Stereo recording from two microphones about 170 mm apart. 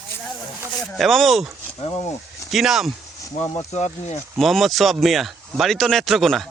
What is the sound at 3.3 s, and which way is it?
Speech, 15° left (ahead or behind).